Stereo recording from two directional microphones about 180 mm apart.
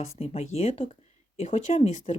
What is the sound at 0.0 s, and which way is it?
Speech, 35° left (ahead or behind).